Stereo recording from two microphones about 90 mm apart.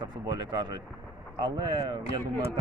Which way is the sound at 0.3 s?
50° right (ahead or behind).